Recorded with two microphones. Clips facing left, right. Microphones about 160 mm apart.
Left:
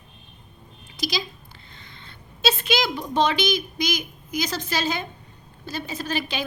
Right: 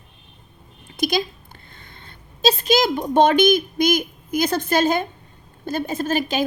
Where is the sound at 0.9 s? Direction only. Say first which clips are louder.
Right 7 dB; 55° right (ahead or behind).